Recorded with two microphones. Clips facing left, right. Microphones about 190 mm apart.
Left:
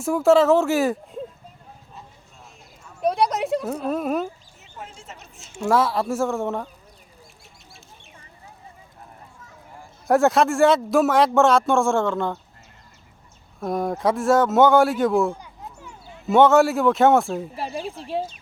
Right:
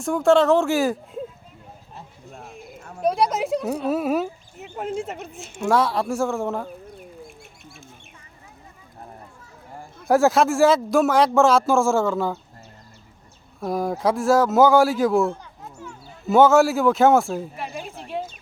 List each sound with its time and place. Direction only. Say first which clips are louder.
0.0 s a man's voice: left 1 dB; 5° left (ahead or behind)
2.0 s a sound: right 5 dB; 55° right (ahead or behind)
3.0 s speech: even; centre (ahead or behind)
4.5 s speech: right 13 dB; 60° right (ahead or behind)
5.5 s a man's voice: even; centre (ahead or behind)
10.1 s a man's voice: even; centre (ahead or behind)
13.6 s a man's voice: even; centre (ahead or behind)
17.6 s speech: left 3 dB; 35° left (ahead or behind)